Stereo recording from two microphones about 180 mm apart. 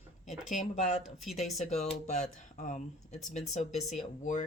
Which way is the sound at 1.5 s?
40° left (ahead or behind).